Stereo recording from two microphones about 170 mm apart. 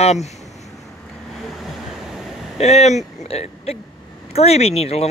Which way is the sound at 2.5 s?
40° left (ahead or behind).